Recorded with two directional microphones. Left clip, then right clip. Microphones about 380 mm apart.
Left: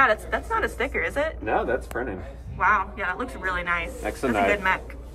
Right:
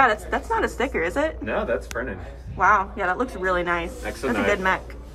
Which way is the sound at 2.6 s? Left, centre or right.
Centre.